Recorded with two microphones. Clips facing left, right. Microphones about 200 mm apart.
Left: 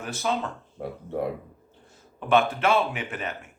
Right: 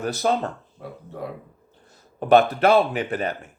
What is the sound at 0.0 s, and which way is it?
Speech, 40° right (ahead or behind).